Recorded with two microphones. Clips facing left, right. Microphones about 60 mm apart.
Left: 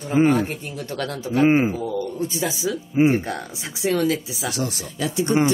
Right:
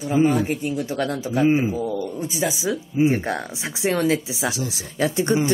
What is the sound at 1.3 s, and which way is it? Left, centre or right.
Speech, left.